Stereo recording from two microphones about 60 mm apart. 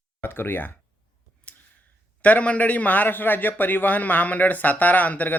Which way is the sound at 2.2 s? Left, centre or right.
Left.